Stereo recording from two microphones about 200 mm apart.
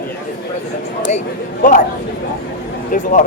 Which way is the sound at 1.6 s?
40° left (ahead or behind).